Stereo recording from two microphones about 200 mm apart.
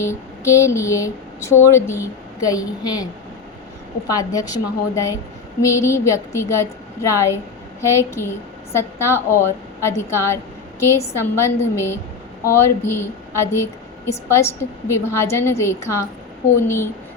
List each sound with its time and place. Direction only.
0.0 s a sound: 15° left (ahead or behind)
1.5 s a woman's voice: 15° left (ahead or behind)
4.1 s a woman's voice: 20° left (ahead or behind)